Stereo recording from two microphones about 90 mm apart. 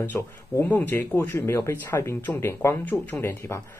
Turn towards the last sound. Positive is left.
turn(degrees=30)  # may be behind; listen again after turning